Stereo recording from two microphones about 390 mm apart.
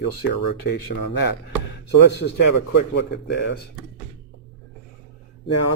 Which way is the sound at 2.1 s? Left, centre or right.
Left.